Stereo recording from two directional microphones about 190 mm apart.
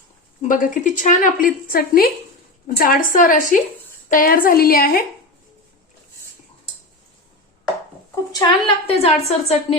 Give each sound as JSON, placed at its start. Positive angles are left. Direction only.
{"t": 0.4, "sound": "a woman's voice", "side_deg": 45}
{"t": 8.1, "sound": "a woman's voice", "side_deg": 20}